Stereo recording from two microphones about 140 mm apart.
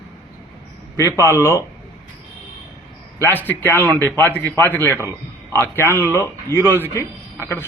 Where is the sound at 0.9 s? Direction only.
20° left (ahead or behind).